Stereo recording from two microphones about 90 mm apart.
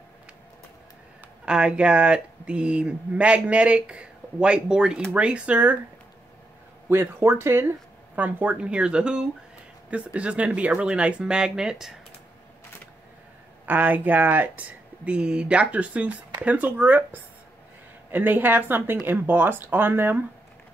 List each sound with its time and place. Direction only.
1.4 s speech: 10° right (ahead or behind)
6.9 s speech: 25° right (ahead or behind); by 11.9 s 5° right (ahead or behind)
13.7 s speech: 20° right (ahead or behind)